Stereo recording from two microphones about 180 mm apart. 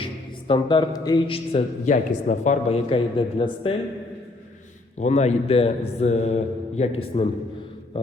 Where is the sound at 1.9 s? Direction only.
40° left (ahead or behind).